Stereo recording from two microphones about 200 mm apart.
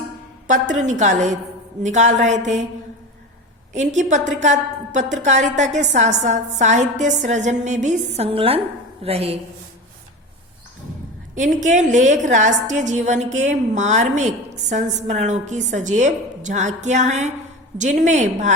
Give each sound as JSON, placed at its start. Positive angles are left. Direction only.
{"t": 0.4, "sound": "a woman's voice", "side_deg": -40}
{"t": 3.7, "sound": "a woman's voice", "side_deg": -35}
{"t": 11.3, "sound": "a woman's voice", "side_deg": -40}